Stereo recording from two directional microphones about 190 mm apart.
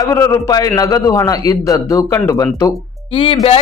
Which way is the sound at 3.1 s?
25° left (ahead or behind).